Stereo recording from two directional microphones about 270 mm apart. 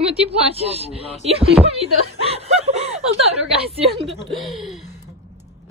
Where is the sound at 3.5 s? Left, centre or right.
Right.